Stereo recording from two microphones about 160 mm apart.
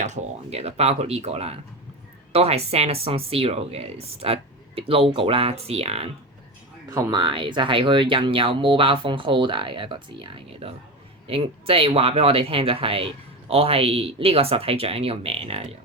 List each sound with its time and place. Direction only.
0.0 s speech: 45° right (ahead or behind)
6.9 s speech: 25° right (ahead or behind)